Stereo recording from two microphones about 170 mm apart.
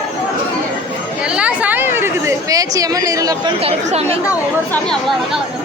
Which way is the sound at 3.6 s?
35° right (ahead or behind).